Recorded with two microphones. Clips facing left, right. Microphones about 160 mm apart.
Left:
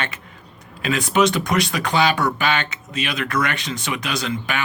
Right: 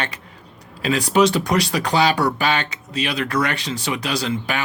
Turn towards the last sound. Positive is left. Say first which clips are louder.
# right 2 dB
turn(degrees=-35)  # may be behind; listen again after turning